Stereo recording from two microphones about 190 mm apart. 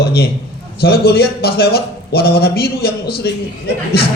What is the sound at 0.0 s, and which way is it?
A man's voice, 55° left (ahead or behind).